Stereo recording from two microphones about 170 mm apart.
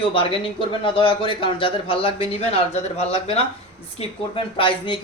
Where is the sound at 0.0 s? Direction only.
30° left (ahead or behind).